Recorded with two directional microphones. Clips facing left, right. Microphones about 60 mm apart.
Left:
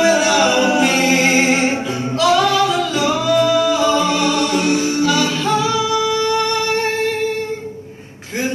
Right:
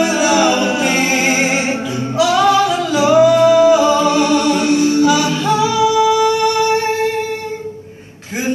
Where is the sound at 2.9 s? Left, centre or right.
Centre.